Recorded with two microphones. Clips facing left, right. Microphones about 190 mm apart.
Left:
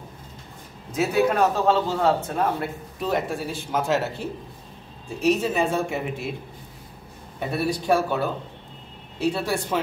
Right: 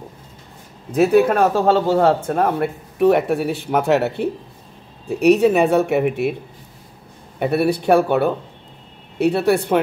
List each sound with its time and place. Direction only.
0.9 s a man's voice: 55° right (ahead or behind)
7.3 s a man's voice: 65° right (ahead or behind)